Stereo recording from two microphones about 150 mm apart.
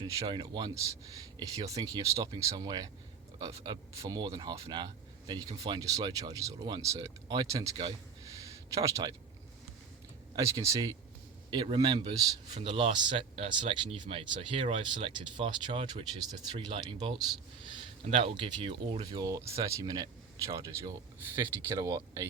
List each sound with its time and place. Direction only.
0.0 s speech: 30° right (ahead or behind)
10.3 s speech: 20° right (ahead or behind)
11.5 s speech: 35° right (ahead or behind)